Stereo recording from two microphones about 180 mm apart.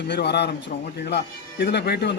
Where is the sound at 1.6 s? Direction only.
70° left (ahead or behind).